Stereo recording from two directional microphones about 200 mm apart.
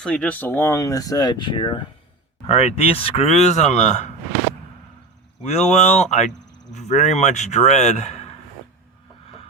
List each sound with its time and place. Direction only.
0.0 s speech: 5° left (ahead or behind); by 4.1 s 35° left (ahead or behind)
5.5 s speech: 35° left (ahead or behind)